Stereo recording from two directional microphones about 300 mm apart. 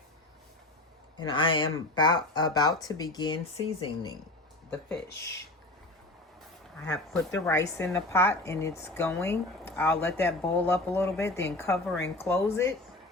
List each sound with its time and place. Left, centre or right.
1.1 s speech: centre
6.7 s speech: centre